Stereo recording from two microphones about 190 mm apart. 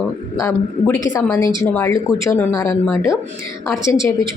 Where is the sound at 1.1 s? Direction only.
15° left (ahead or behind).